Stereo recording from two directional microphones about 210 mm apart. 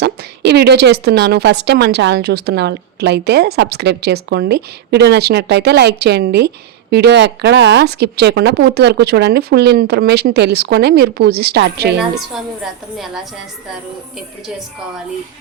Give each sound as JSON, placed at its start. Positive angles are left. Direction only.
{"t": 0.0, "sound": "a woman's voice", "side_deg": -50}